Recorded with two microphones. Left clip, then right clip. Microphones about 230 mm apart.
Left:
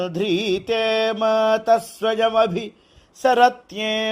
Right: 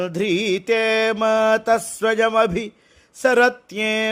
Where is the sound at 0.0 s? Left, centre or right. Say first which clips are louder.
Right 1 dB; right.